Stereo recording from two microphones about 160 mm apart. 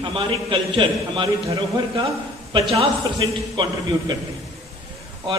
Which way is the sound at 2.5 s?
30° right (ahead or behind).